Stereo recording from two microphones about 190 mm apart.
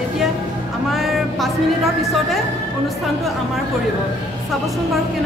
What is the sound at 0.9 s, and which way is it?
Speech, centre (ahead or behind).